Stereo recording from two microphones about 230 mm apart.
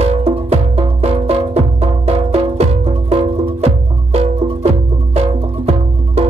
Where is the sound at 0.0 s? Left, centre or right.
Right.